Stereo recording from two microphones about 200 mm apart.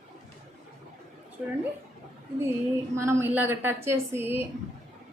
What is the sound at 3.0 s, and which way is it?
A woman's voice, 15° right (ahead or behind).